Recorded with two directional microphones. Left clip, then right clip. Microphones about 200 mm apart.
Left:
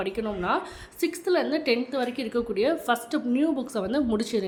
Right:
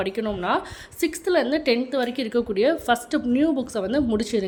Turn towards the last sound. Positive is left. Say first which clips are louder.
# right 3 dB
turn(degrees=-10)  # may be behind; listen again after turning